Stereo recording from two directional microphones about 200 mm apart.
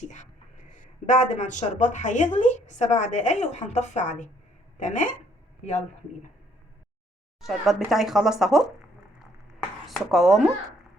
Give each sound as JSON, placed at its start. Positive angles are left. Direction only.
{"t": 0.1, "sound": "speech", "side_deg": 35}
{"t": 7.4, "sound": "speech", "side_deg": 0}
{"t": 9.8, "sound": "speech", "side_deg": 0}